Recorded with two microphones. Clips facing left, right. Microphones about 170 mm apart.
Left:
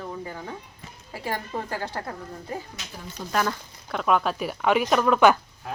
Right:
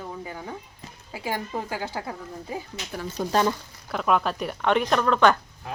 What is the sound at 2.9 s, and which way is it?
Speech, 60° right (ahead or behind).